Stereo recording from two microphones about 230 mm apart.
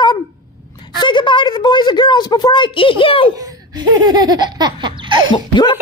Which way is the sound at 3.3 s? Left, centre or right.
Centre.